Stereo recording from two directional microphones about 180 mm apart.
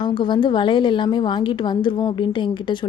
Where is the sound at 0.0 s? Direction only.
25° left (ahead or behind).